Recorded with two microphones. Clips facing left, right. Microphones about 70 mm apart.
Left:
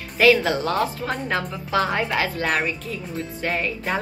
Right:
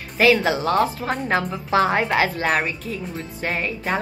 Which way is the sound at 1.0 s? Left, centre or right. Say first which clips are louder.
Right 2 dB; right.